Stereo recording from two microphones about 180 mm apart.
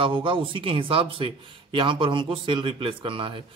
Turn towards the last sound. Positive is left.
turn(degrees=-30)  # may be behind; listen again after turning